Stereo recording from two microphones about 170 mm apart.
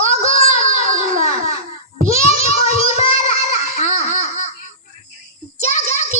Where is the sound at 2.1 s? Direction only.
35° left (ahead or behind).